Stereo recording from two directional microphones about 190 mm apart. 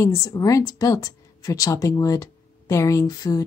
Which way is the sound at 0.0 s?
15° left (ahead or behind).